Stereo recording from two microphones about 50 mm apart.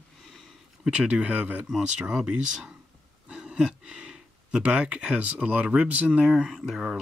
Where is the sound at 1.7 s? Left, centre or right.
Centre.